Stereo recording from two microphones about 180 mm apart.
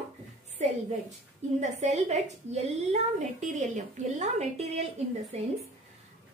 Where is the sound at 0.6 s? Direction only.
40° right (ahead or behind).